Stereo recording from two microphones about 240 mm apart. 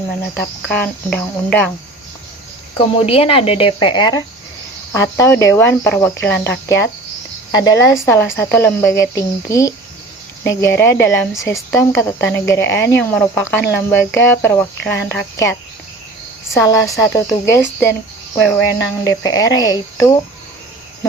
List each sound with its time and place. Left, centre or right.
0.3 s speech: centre
2.7 s speech: left
16.6 s speech: centre
18.8 s speech: centre